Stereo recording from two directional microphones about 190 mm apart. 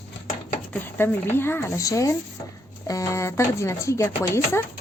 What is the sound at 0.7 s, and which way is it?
Speech, 10° left (ahead or behind).